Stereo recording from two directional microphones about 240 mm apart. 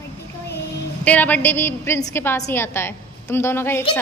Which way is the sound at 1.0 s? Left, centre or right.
Centre.